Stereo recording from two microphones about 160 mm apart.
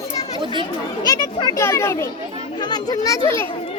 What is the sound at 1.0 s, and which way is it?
Speech, 25° left (ahead or behind).